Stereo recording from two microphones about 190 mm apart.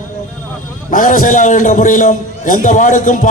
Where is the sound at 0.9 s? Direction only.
45° left (ahead or behind).